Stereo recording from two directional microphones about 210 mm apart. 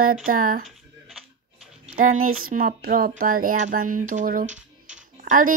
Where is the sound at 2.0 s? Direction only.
80° right.